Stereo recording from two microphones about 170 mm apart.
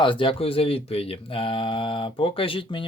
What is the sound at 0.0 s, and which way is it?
Speech, 30° left (ahead or behind).